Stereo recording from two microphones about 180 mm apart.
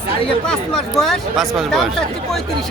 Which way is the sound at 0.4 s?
5° left (ahead or behind).